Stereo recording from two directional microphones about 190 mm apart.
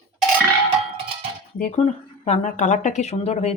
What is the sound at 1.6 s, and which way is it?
A woman's voice, 40° left (ahead or behind).